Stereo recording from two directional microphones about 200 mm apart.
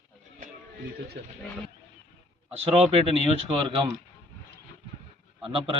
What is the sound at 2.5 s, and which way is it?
Speech, 30° right (ahead or behind).